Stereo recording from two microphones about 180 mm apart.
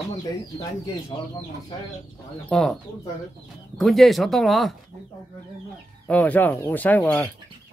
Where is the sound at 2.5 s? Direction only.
5° left (ahead or behind).